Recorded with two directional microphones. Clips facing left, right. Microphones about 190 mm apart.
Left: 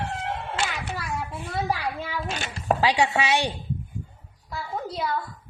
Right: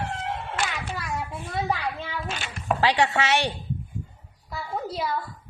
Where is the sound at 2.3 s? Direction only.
40° left (ahead or behind).